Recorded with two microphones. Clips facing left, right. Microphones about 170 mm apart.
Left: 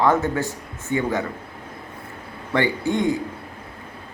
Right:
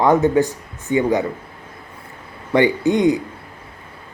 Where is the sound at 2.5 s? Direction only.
15° right (ahead or behind).